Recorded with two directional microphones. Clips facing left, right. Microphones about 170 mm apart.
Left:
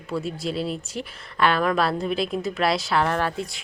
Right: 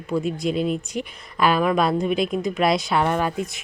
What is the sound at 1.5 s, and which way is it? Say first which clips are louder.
Speech: right 3 dB; 15° right (ahead or behind).